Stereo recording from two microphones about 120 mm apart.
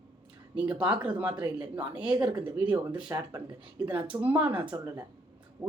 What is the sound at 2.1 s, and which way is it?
Speech, 40° right (ahead or behind).